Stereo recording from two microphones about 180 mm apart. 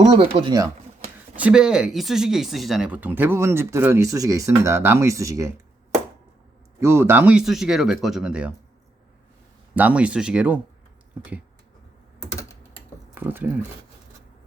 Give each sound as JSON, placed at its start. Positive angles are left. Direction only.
{"t": 0.1, "sound": "speech", "side_deg": -25}
{"t": 1.4, "sound": "speech", "side_deg": -5}
{"t": 6.7, "sound": "speech", "side_deg": -15}
{"t": 9.7, "sound": "speech", "side_deg": -10}
{"t": 13.1, "sound": "speech", "side_deg": -10}